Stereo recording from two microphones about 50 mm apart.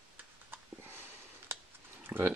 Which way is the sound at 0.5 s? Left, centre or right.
Right.